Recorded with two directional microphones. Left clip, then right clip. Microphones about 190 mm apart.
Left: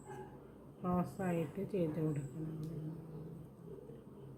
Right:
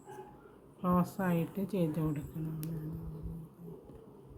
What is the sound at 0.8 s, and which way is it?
A woman's voice, 65° right (ahead or behind).